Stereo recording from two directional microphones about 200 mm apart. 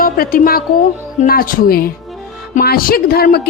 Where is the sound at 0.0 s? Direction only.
45° left (ahead or behind).